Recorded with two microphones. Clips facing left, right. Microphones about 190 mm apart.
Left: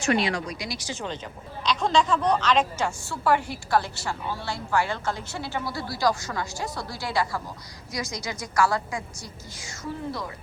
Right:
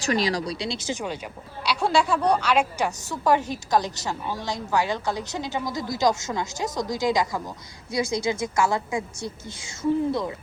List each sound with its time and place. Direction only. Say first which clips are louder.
0.0 s a woman's voice: even; 35° right (ahead or behind); by 7.5 s 15° right (ahead or behind)
7.9 s a woman's voice: right 8 dB; 30° right (ahead or behind)